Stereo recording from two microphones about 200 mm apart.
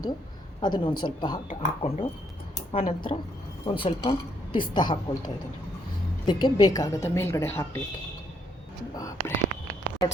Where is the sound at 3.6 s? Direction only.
25° left (ahead or behind).